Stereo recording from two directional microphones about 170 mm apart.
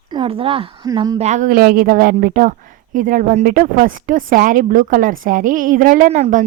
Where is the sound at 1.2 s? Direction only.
45° right (ahead or behind).